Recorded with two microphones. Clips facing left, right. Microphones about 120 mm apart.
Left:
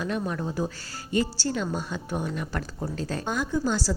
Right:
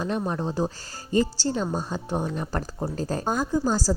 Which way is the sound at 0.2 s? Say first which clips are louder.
Right 2 dB; 30° right (ahead or behind).